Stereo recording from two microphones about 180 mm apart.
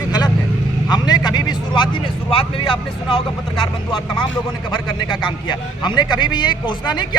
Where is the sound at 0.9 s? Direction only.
25° left (ahead or behind).